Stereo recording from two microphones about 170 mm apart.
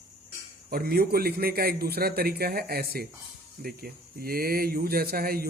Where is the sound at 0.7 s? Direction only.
60° right (ahead or behind).